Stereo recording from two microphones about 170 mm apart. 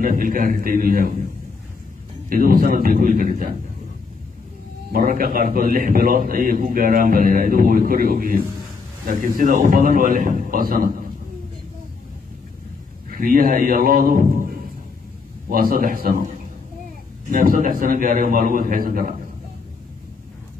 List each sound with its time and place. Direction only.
0.0 s a man's voice: 55° right (ahead or behind)
2.2 s a man's voice: 55° right (ahead or behind)
4.9 s a man's voice: 60° right (ahead or behind)
13.1 s a man's voice: 55° right (ahead or behind)
17.3 s a man's voice: 55° right (ahead or behind)